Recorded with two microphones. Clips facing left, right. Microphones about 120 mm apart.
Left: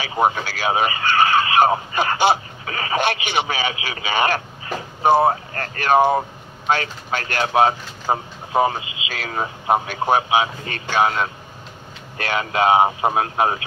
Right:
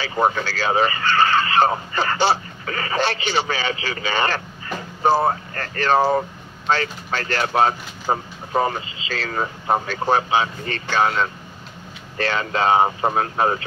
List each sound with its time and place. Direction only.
0.0 s speech: 15° left (ahead or behind)